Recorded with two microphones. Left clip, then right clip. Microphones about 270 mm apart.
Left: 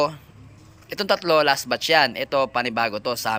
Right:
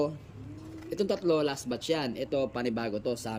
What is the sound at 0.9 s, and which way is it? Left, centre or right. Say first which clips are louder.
Speech: left 8 dB; centre.